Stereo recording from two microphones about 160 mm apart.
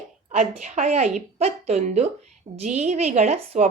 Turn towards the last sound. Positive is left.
turn(degrees=-40)  # may be behind; listen again after turning